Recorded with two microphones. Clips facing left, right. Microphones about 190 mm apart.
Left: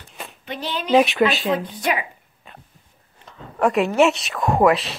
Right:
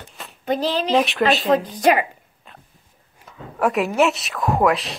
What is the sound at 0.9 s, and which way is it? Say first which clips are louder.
Speech: left 4 dB; centre (ahead or behind).